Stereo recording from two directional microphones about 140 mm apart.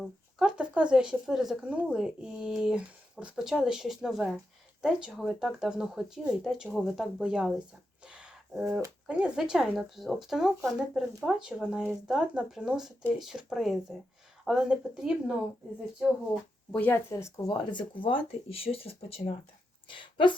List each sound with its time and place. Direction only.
0.0 s speech: 5° right (ahead or behind)
8.0 s a sound: 5° right (ahead or behind)
9.0 s speech: 5° right (ahead or behind)
16.7 s speech: 15° left (ahead or behind); by 20.3 s 35° left (ahead or behind)